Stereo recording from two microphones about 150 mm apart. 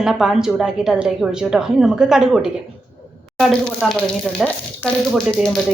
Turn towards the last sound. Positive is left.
turn(degrees=5)  # may be behind; listen again after turning